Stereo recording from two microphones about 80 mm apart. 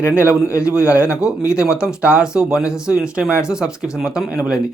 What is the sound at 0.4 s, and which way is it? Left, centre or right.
Speech, left.